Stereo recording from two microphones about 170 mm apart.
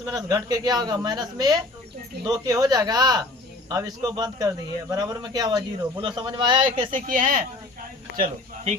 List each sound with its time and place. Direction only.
0.0 s a man's voice: 20° right (ahead or behind)
6.9 s speech: 50° right (ahead or behind)